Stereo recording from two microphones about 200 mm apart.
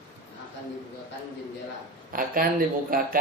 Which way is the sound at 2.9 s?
45° right (ahead or behind).